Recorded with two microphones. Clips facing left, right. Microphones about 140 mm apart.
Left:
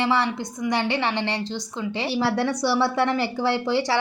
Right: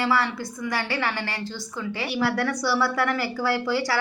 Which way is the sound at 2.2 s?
25° left (ahead or behind).